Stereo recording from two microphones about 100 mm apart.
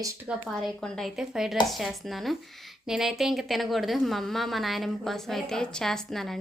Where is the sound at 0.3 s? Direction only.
Centre (ahead or behind).